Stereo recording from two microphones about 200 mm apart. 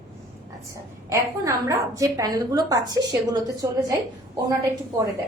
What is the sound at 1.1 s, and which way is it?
A woman's voice, 15° right (ahead or behind).